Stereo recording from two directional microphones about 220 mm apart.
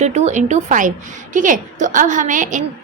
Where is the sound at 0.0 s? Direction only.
30° right (ahead or behind).